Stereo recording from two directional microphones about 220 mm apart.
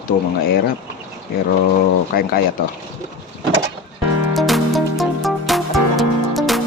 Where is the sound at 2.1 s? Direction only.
40° left (ahead or behind).